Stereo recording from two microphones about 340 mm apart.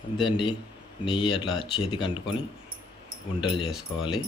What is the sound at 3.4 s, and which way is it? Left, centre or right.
Speech, centre.